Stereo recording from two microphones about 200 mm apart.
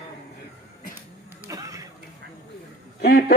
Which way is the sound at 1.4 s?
15° right (ahead or behind).